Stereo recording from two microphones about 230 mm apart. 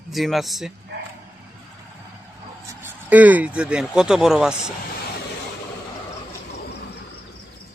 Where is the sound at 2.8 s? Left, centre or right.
Centre.